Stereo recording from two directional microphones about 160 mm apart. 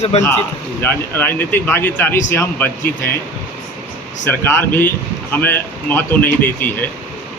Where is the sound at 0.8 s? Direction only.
15° left (ahead or behind).